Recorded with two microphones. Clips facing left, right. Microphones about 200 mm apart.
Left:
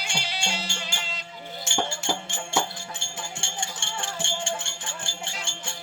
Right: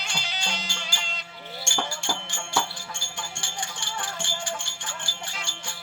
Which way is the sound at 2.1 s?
20° left (ahead or behind).